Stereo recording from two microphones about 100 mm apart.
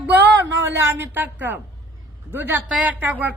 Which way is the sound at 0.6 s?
25° right (ahead or behind).